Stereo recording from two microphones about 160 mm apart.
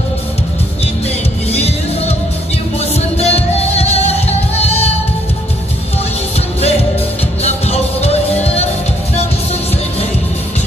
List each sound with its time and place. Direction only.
1.5 s music: 40° left (ahead or behind)
7.4 s music: 40° left (ahead or behind)